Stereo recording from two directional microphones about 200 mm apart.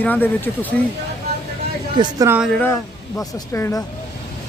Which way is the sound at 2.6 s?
10° left (ahead or behind).